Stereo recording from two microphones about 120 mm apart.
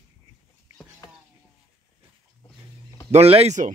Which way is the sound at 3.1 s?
60° right (ahead or behind).